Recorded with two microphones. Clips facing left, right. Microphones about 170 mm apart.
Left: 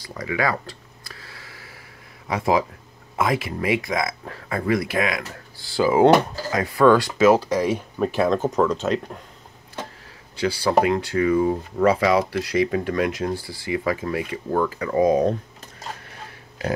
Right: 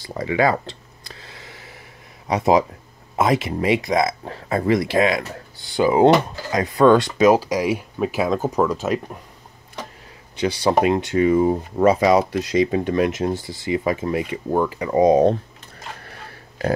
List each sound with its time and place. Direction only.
0.0 s a sound: 25° right (ahead or behind)
2.2 s speech: 20° right (ahead or behind)
10.4 s speech: 20° right (ahead or behind)